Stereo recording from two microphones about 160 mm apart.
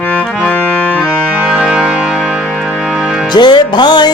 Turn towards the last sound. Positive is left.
turn(degrees=25)  # may be behind; listen again after turning